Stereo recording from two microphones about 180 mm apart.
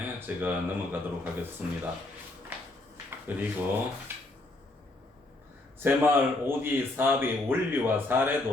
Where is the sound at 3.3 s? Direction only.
10° right (ahead or behind).